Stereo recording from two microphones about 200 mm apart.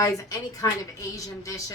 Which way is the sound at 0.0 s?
15° left (ahead or behind).